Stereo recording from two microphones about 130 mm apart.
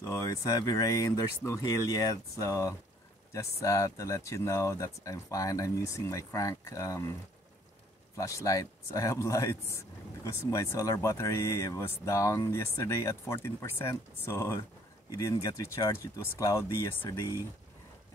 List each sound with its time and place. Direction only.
0.0 s speech: 25° left (ahead or behind)
8.2 s speech: 25° left (ahead or behind)